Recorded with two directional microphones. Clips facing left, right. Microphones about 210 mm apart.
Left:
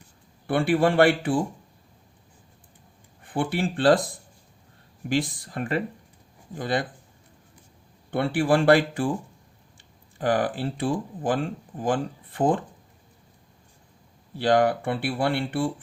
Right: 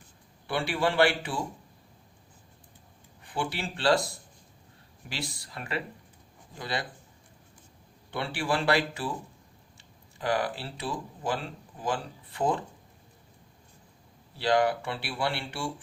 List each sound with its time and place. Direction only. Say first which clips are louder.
0.4 s speech: left 7 dB; 55° left (ahead or behind)
3.2 s speech: left 7 dB; 55° left (ahead or behind)
8.1 s speech: left 8 dB; 55° left (ahead or behind)
14.3 s speech: left 4 dB; 50° left (ahead or behind)